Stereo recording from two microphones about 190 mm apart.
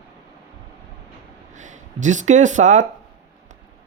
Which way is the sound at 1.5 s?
40° right (ahead or behind).